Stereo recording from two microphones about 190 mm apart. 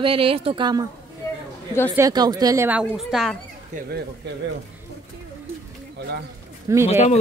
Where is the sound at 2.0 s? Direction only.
20° right (ahead or behind); by 3.4 s centre (ahead or behind).